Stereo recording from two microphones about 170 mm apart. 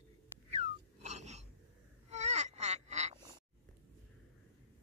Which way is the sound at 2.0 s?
40° right (ahead or behind).